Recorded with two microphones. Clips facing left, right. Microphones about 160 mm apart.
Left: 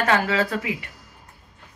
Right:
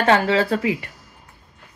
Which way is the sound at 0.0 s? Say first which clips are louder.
Right 4 dB; 30° right (ahead or behind).